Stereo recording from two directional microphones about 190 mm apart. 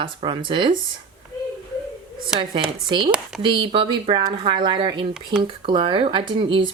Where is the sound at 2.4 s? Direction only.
25° right (ahead or behind).